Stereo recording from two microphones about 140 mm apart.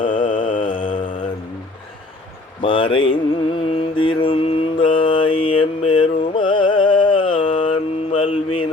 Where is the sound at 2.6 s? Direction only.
40° left (ahead or behind).